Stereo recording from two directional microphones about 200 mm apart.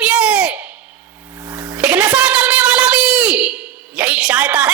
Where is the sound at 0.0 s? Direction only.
5° right (ahead or behind).